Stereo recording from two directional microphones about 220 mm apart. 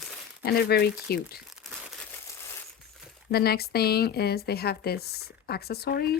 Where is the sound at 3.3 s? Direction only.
45° left (ahead or behind).